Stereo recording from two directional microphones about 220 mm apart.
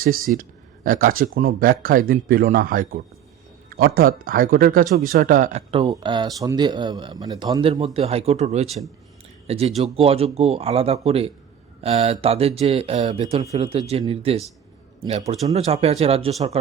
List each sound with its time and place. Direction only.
0.0 s speech: 40° right (ahead or behind)
15.5 s speech: 30° right (ahead or behind)